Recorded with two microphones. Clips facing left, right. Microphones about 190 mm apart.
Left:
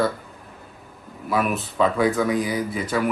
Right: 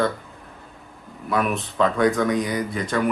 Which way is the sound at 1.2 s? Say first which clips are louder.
Even; 5° left (ahead or behind).